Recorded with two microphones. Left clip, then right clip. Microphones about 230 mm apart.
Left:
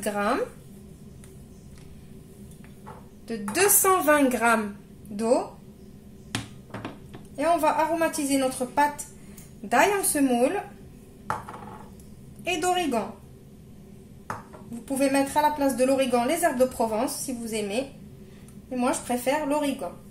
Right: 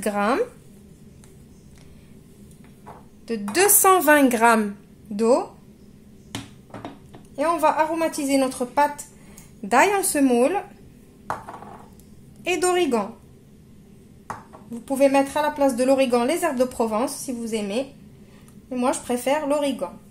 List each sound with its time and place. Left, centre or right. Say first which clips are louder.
0.0 s a woman's voice: right 4 dB; right
3.3 s a woman's voice: right 3 dB; right
7.3 s a woman's voice: right 3 dB; right
12.4 s a woman's voice: right 4 dB; right
14.9 s a woman's voice: right 6 dB; right